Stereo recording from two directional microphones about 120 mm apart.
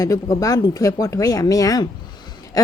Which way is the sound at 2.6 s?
30° left (ahead or behind).